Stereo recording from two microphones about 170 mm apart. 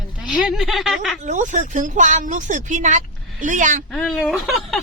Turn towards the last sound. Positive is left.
turn(degrees=0)  # may be behind; listen again after turning